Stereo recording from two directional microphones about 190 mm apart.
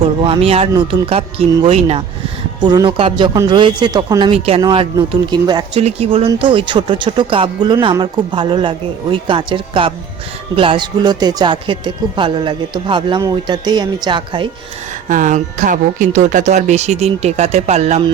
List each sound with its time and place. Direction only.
0.3 s speech: 30° right (ahead or behind)
5.8 s speech: 30° right (ahead or behind)
15.1 s speech: 40° right (ahead or behind)